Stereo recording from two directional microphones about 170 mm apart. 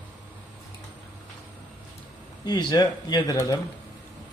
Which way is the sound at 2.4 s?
25° left (ahead or behind).